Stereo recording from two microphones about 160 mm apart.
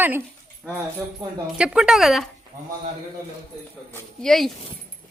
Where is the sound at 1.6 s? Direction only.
5° right (ahead or behind).